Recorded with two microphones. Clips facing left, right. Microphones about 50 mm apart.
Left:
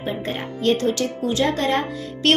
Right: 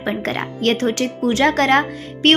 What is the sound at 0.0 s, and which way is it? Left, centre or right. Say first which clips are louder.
A woman's voice: right 4 dB; right.